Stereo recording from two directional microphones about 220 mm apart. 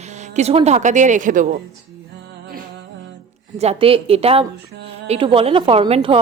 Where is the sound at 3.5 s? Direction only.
30° right (ahead or behind).